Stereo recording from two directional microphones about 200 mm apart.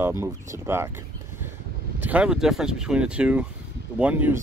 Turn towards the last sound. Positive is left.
turn(degrees=-5)  # may be behind; listen again after turning